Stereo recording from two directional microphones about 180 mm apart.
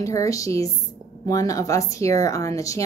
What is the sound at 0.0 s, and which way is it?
A woman's voice, 20° left (ahead or behind).